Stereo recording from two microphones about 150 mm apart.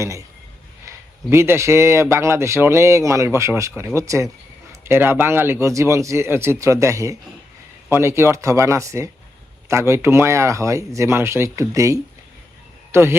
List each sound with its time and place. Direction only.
0.0 s speech: 20° right (ahead or behind)